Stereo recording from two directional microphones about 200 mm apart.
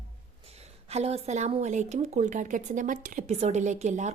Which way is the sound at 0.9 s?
30° right (ahead or behind).